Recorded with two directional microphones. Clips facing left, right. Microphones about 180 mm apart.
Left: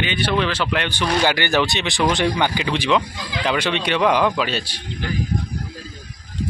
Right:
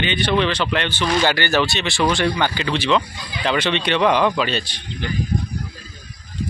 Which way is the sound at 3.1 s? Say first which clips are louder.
Left 3 dB; 90° left.